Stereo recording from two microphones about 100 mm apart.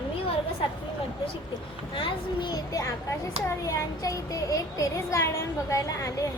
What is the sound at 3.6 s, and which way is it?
A woman's voice, 30° left (ahead or behind).